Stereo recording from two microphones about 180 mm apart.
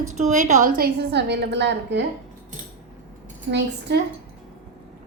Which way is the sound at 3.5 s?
70° right (ahead or behind).